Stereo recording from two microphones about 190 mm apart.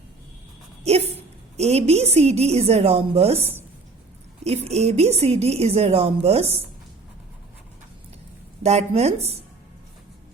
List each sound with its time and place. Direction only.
0.9 s a woman's voice: 35° right (ahead or behind)
8.6 s a woman's voice: 35° right (ahead or behind)